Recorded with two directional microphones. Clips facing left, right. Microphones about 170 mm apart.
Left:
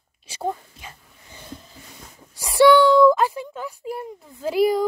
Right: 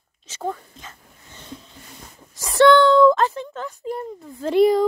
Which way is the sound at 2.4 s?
10° left (ahead or behind).